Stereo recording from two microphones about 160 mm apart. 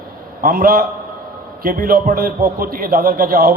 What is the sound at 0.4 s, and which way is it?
A man's voice, 65° right (ahead or behind).